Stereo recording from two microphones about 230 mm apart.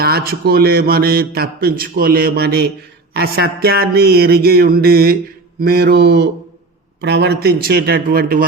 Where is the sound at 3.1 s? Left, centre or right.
Right.